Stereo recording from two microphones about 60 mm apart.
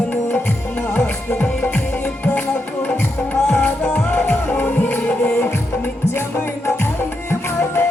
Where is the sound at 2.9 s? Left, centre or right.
Left.